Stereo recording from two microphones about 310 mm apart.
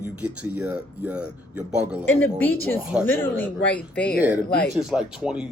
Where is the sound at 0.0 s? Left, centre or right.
Centre.